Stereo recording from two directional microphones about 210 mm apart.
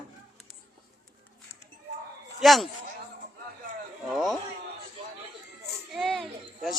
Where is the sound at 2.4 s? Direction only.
Centre (ahead or behind).